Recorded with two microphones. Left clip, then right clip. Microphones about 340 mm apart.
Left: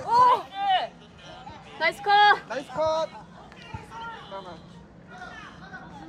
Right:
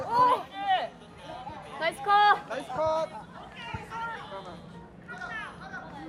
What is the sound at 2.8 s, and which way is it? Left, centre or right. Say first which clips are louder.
Speech: left 3 dB; left.